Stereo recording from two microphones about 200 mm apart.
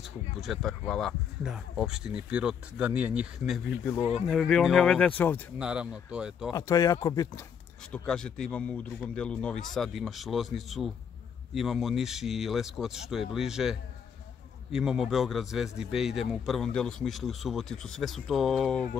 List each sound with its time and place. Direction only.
0.0 s speech: centre (ahead or behind)
5.6 s speech: 5° right (ahead or behind)
6.5 s speech: 15° left (ahead or behind)
7.9 s speech: 5° left (ahead or behind)